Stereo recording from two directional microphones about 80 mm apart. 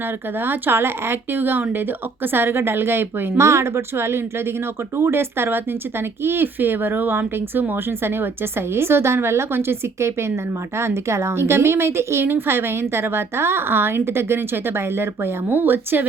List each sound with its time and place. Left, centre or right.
0.3 s speech: right